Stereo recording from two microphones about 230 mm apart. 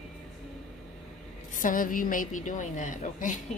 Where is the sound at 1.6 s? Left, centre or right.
Left.